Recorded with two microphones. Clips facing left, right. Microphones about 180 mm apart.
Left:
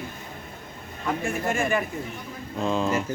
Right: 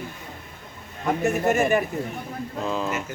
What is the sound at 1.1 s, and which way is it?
Speech, 40° right (ahead or behind).